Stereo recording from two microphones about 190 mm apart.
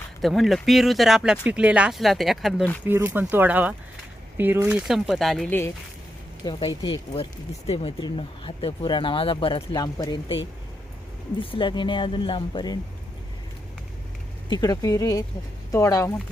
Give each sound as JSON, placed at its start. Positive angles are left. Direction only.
{"t": 0.2, "sound": "speech", "side_deg": 0}
{"t": 2.8, "sound": "speech", "side_deg": -10}
{"t": 6.4, "sound": "speech", "side_deg": 25}
{"t": 11.3, "sound": "speech", "side_deg": 25}
{"t": 14.5, "sound": "speech", "side_deg": 20}